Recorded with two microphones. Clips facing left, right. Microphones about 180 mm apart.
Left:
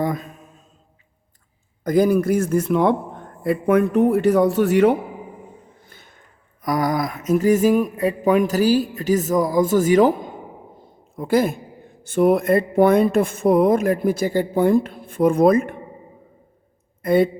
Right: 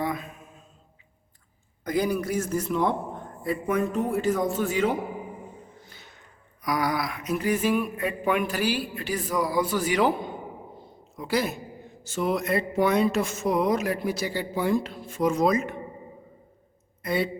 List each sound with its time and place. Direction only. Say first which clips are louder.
0.0 s mantra: left 6 dB; 40° left (ahead or behind)
1.8 s a man's voice: left 9 dB; 45° left (ahead or behind); by 4.9 s 65° left (ahead or behind)
5.8 s speech: left 1 dB; 50° left (ahead or behind)
17.0 s a woman's voice: left 10 dB; 50° left (ahead or behind)